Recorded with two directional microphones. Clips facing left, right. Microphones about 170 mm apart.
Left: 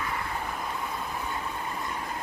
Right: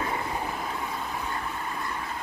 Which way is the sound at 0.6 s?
Centre (ahead or behind).